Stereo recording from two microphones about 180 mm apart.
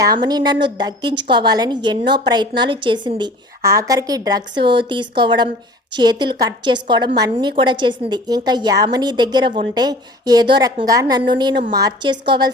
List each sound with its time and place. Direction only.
0.0 s a woman's voice: 20° right (ahead or behind)